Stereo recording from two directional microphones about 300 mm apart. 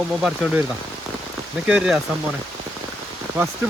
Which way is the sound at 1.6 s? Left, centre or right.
Centre.